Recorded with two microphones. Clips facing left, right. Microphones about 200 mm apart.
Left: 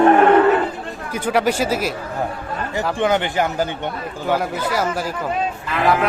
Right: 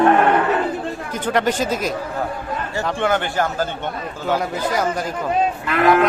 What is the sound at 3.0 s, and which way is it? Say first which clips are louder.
Speech: left 2 dB; 15° left (ahead or behind).